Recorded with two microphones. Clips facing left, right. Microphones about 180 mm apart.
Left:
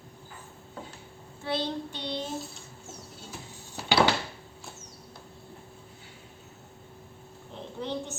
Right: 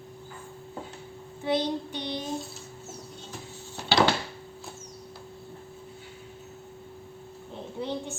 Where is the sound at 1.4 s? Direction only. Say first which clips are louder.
Right 4 dB; 15° right (ahead or behind).